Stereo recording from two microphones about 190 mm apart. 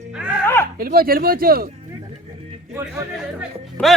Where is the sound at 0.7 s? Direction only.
50° right (ahead or behind).